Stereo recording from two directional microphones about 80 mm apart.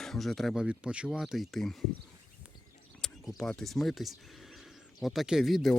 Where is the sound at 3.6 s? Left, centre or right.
Centre.